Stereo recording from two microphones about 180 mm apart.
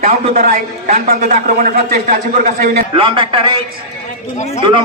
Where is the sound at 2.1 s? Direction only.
45° right (ahead or behind).